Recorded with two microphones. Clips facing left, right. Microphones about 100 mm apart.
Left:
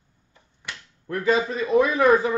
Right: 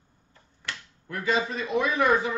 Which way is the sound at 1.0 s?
35° left (ahead or behind).